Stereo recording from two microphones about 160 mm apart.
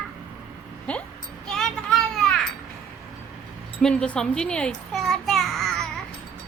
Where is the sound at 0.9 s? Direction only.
10° left (ahead or behind).